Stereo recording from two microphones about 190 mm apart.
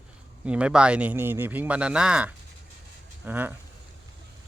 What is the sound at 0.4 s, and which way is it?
Speech, 5° right (ahead or behind).